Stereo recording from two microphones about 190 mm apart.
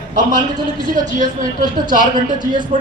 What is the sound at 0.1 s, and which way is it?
A man's voice, 45° right (ahead or behind).